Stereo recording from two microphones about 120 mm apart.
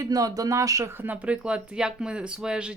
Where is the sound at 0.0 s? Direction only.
30° right (ahead or behind).